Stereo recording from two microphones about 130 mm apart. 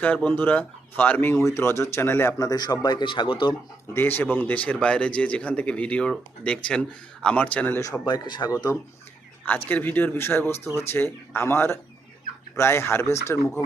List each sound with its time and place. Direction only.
0.0 s speech: 10° left (ahead or behind); by 3.5 s 40° left (ahead or behind)
3.9 s speech: 15° left (ahead or behind)
8.0 s speech: 35° left (ahead or behind)
9.6 s speech: 15° left (ahead or behind)